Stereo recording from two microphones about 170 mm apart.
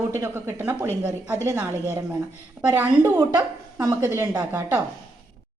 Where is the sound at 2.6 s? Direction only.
10° right (ahead or behind).